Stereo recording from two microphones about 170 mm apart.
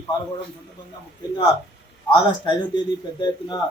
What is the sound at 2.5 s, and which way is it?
A man's voice, 25° left (ahead or behind).